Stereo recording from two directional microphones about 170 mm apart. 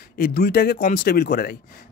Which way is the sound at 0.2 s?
60° left (ahead or behind).